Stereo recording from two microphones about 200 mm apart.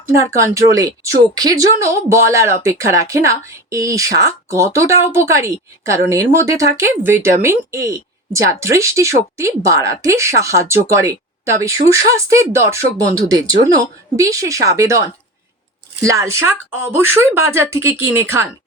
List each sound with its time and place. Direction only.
0.2 s a woman's voice: 15° right (ahead or behind)
16.0 s a woman's voice: 15° right (ahead or behind)